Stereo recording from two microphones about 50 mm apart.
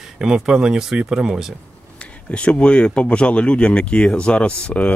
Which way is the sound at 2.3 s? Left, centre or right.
Left.